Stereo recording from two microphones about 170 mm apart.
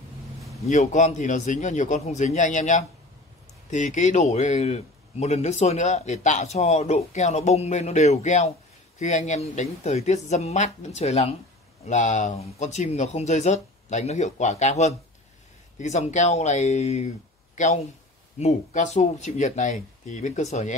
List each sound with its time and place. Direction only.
0.7 s speech: 45° left (ahead or behind)
18.4 s speech: 45° left (ahead or behind)